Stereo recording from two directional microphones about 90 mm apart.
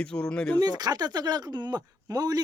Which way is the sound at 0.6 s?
50° right (ahead or behind).